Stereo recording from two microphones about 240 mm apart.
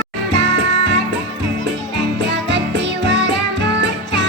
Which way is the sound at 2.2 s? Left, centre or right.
Right.